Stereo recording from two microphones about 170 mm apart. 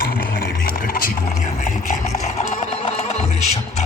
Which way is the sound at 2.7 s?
35° left (ahead or behind).